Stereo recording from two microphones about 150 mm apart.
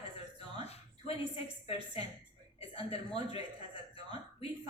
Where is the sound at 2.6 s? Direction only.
40° left (ahead or behind).